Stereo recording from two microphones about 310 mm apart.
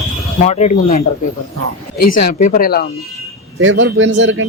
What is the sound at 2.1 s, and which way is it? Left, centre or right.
Speech, left.